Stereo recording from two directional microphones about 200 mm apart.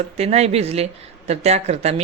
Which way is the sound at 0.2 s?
30° right (ahead or behind).